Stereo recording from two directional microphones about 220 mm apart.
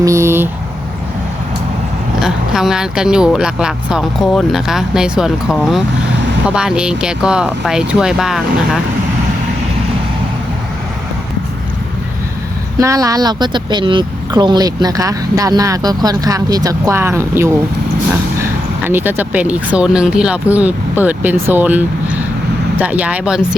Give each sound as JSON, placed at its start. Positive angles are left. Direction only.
{"t": 0.0, "sound": "a sound", "side_deg": -15}
{"t": 2.2, "sound": "speech", "side_deg": 0}
{"t": 12.8, "sound": "speech", "side_deg": -15}
{"t": 18.9, "sound": "speech", "side_deg": -10}